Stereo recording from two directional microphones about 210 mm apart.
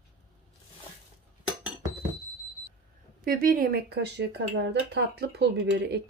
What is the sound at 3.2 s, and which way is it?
Speech, 45° right (ahead or behind).